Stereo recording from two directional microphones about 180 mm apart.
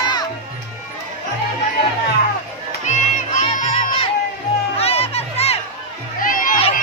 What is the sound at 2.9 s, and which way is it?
Music, 45° left (ahead or behind).